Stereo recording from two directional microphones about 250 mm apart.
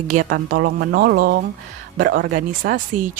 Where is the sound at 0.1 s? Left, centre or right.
Right.